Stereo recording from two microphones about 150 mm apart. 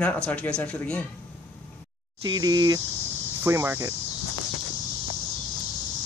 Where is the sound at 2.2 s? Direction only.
25° right (ahead or behind).